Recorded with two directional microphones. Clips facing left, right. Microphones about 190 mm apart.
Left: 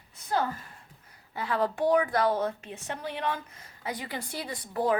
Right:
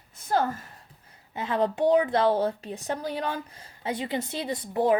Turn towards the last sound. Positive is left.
turn(degrees=-20)  # may be behind; listen again after turning